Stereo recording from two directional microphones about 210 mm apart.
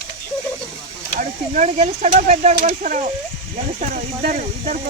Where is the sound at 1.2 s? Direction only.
35° right (ahead or behind).